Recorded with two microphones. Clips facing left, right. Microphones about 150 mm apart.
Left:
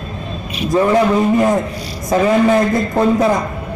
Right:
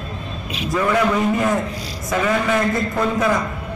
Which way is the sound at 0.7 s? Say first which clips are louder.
Left 5 dB; 30° left (ahead or behind).